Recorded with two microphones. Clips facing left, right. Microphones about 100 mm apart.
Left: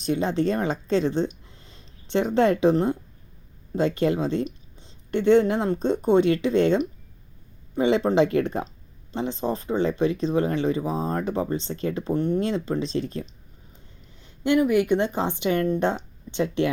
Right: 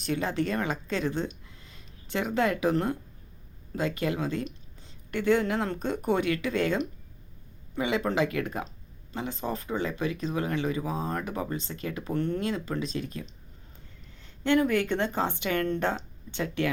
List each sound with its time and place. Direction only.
0.0 s speech: 20° left (ahead or behind)
12.1 s speech: 15° left (ahead or behind)
14.2 s speech: 15° left (ahead or behind)